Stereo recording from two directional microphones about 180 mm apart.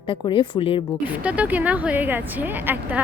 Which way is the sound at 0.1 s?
30° left (ahead or behind).